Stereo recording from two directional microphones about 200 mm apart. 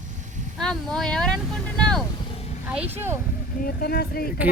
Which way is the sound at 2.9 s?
10° right (ahead or behind).